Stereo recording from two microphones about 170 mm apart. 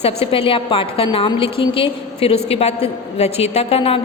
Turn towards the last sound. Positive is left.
turn(degrees=35)  # may be behind; listen again after turning